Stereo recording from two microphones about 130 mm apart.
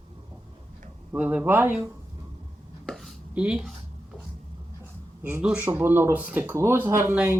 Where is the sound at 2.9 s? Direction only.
Centre (ahead or behind).